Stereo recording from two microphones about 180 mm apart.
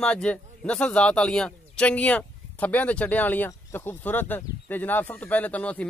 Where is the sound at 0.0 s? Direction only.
5° left (ahead or behind).